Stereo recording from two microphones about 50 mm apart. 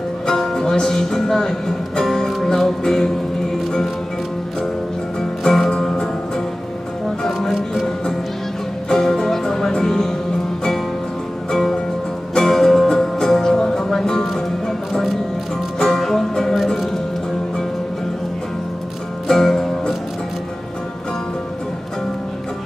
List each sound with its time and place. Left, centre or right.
0.3 s music: centre
5.4 s music: centre
12.4 s music: centre
15.8 s music: centre
19.2 s music: centre